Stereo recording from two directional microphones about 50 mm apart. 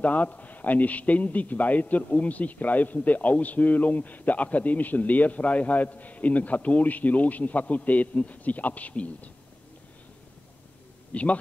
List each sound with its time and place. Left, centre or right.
0.0 s a man's voice: left
11.1 s speech: left